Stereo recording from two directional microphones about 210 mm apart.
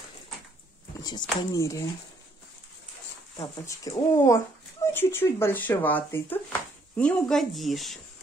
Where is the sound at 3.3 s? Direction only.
20° left (ahead or behind); by 8.0 s centre (ahead or behind).